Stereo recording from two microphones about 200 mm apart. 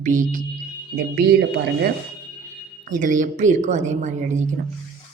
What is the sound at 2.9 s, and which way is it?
Speech, 40° right (ahead or behind).